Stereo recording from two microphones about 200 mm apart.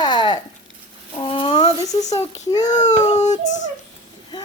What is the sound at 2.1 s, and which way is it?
Speech, 20° left (ahead or behind).